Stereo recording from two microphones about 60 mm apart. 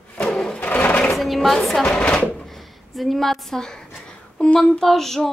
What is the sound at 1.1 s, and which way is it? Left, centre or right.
Speech, centre.